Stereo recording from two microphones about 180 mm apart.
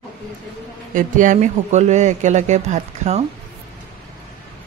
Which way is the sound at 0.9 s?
45° right (ahead or behind).